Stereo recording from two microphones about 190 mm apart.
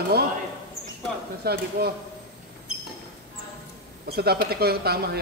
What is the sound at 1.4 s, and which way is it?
Speech, 55° right (ahead or behind).